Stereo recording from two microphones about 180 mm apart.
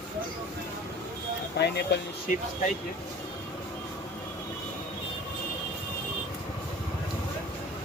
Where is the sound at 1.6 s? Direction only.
70° left (ahead or behind).